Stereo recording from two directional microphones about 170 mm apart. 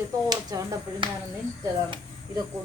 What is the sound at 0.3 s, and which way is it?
Speech, 25° right (ahead or behind).